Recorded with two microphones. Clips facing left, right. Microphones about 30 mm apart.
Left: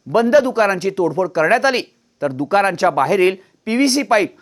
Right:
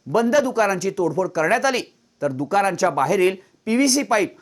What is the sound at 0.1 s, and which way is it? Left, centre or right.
Speech, left.